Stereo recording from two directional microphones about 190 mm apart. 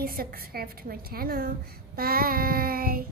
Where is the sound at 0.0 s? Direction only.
50° right (ahead or behind).